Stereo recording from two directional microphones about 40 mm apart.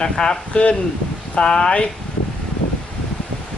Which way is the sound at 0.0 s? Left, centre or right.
Centre.